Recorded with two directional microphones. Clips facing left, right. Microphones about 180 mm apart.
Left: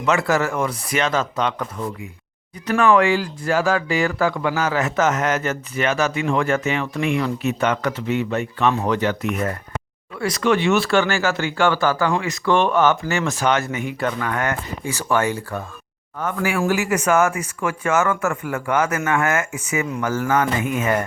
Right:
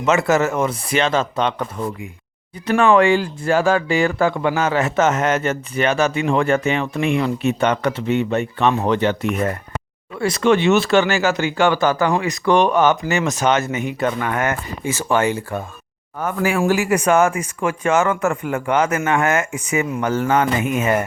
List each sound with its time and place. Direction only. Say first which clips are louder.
0.0 s speech: right 3 dB; 20° right (ahead or behind)